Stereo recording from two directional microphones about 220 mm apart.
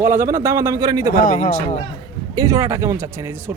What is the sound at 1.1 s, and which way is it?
Speech, 40° left (ahead or behind).